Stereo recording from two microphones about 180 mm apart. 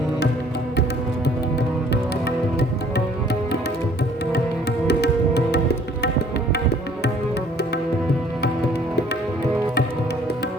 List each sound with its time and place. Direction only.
2.2 s music: 70° left (ahead or behind)
4.9 s music: 65° left (ahead or behind)
6.5 s tabla: 65° left (ahead or behind)